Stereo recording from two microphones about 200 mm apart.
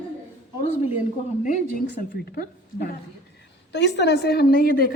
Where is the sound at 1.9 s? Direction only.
50° left (ahead or behind).